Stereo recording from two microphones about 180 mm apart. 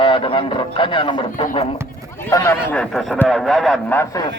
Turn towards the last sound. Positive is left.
turn(degrees=20)  # may be behind; listen again after turning